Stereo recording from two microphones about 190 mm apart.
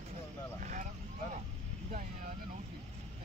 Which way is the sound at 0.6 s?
40° right (ahead or behind).